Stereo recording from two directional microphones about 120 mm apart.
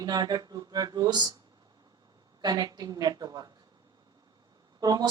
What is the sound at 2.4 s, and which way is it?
Speech, 35° right (ahead or behind).